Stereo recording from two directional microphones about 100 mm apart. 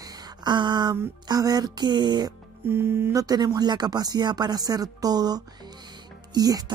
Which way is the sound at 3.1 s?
40° right (ahead or behind).